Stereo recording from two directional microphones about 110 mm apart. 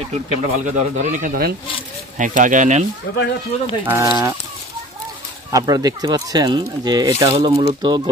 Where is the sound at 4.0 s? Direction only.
40° right (ahead or behind).